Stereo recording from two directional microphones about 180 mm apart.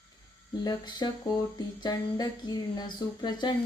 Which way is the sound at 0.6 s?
25° left (ahead or behind).